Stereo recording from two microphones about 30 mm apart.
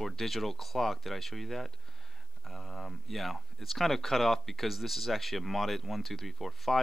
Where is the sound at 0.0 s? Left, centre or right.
Centre.